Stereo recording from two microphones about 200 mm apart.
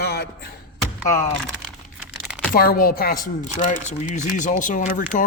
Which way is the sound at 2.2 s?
Centre (ahead or behind).